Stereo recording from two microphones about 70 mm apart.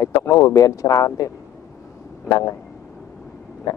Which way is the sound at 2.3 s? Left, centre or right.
Left.